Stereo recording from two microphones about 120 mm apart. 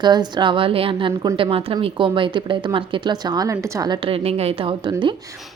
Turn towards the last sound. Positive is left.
turn(degrees=-45)  # may be behind; listen again after turning